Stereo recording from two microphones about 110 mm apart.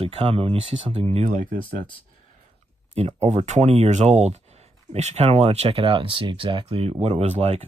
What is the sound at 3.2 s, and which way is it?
Speech, 90° right.